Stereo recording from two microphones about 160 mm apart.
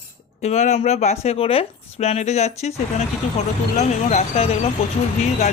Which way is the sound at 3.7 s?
45° left (ahead or behind).